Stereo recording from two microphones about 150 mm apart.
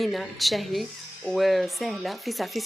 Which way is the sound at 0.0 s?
Centre (ahead or behind).